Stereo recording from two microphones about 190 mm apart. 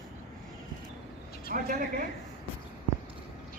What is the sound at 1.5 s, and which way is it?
Speech, 45° right (ahead or behind).